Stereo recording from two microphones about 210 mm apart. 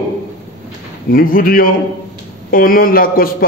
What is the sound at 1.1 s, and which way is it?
A man's voice, 45° left (ahead or behind).